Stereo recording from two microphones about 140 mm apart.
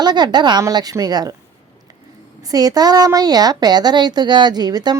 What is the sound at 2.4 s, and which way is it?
A woman's voice, 25° right (ahead or behind).